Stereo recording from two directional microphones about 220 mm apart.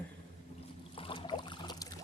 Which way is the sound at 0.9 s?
25° left (ahead or behind).